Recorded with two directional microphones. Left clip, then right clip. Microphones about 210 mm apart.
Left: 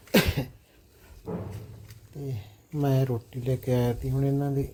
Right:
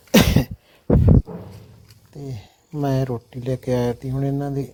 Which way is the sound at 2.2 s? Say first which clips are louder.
Right 3 dB; 40° right (ahead or behind).